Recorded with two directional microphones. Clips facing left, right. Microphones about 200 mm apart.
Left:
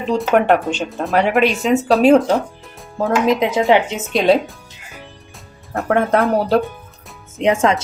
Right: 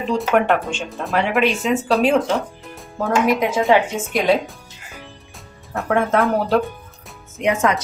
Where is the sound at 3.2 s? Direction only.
20° left (ahead or behind).